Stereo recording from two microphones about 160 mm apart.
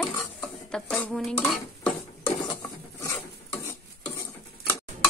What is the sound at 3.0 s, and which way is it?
Stir, 15° left (ahead or behind).